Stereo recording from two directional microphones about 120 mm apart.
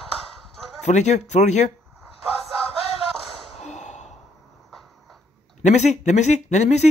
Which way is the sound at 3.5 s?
75° left (ahead or behind).